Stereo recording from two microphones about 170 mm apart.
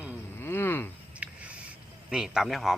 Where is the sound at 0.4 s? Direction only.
15° left (ahead or behind).